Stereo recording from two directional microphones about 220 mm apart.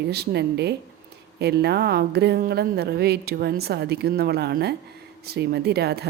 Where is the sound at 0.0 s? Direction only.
50° right (ahead or behind).